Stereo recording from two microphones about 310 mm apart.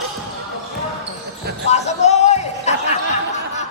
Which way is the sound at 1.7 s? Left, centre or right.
Left.